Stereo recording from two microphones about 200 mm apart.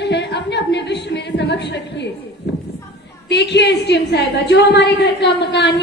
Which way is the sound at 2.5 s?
60° left (ahead or behind).